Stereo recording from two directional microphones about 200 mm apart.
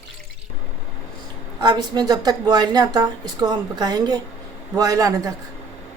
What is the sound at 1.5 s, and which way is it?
A woman's voice, 20° right (ahead or behind).